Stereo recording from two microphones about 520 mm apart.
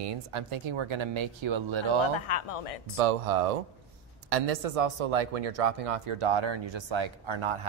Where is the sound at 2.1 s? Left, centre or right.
Left.